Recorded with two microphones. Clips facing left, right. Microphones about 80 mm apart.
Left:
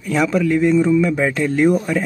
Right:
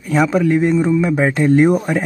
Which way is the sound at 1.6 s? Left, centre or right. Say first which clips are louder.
Right 2 dB; right.